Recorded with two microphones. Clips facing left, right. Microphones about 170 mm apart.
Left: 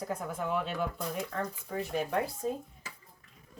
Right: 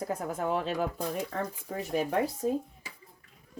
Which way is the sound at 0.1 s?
45° right (ahead or behind).